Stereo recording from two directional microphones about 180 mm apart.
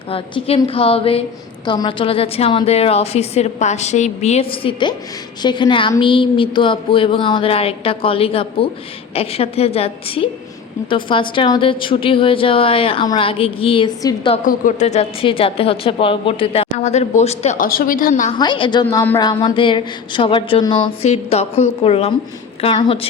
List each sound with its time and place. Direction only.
0.1 s a woman's voice: 30° left (ahead or behind)
14.4 s a woman's voice: 45° left (ahead or behind)
17.7 s a woman's voice: 50° left (ahead or behind)
18.3 s a woman's voice: 25° left (ahead or behind)